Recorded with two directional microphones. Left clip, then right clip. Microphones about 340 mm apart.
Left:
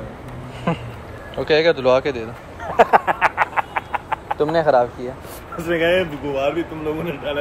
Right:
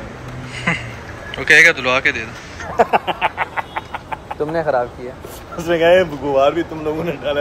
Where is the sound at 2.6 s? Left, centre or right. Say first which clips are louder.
Left 1 dB; left.